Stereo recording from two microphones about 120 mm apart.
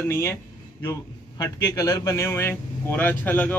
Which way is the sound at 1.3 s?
30° left (ahead or behind).